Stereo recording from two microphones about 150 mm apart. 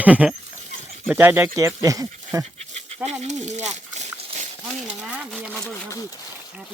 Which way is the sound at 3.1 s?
50° right (ahead or behind).